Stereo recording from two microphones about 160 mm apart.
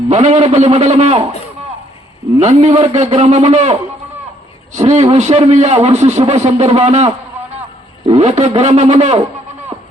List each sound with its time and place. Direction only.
0.1 s a man's voice: 45° right (ahead or behind)
2.4 s a man's voice: 45° right (ahead or behind)